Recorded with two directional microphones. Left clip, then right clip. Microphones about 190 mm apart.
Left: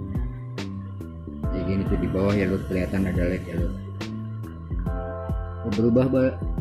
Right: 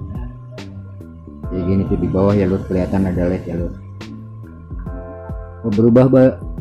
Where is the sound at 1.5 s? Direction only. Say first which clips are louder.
Right 8 dB; 10° right (ahead or behind).